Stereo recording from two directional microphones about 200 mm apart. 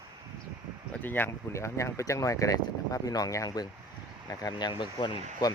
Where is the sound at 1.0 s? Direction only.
10° left (ahead or behind).